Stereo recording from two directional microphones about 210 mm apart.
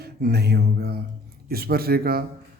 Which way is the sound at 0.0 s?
50° right (ahead or behind).